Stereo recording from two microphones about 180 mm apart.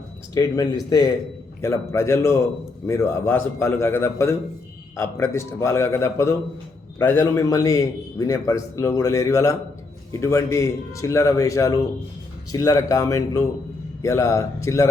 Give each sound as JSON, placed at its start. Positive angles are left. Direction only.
{"t": 0.3, "sound": "a man's voice", "side_deg": 20}